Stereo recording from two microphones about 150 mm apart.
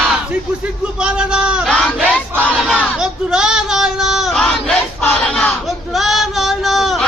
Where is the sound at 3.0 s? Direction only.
5° right (ahead or behind).